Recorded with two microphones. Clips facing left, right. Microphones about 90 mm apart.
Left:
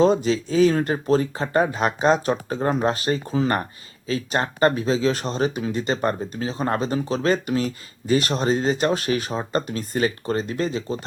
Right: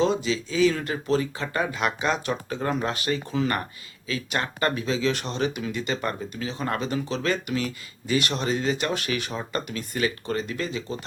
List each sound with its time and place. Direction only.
0.0 s speech: 40° left (ahead or behind)